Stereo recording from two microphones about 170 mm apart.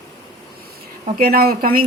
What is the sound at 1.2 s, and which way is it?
Speech, 60° right (ahead or behind).